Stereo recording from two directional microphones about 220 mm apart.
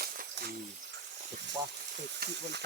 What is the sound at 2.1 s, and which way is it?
Sizzle, 50° right (ahead or behind).